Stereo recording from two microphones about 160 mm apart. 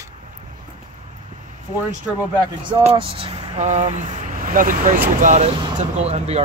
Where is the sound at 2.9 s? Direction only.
35° right (ahead or behind); by 5.0 s 60° right (ahead or behind).